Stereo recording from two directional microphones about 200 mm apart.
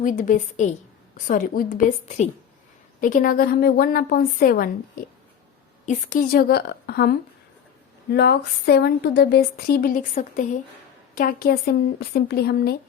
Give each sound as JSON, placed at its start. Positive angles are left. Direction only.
{"t": 0.0, "sound": "a woman's voice", "side_deg": 40}